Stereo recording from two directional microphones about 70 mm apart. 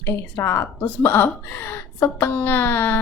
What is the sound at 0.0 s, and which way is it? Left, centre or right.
Speech, left.